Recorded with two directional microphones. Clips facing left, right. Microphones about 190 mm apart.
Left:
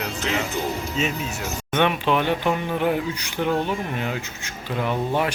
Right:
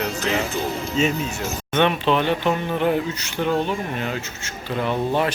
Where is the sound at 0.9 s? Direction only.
Centre (ahead or behind).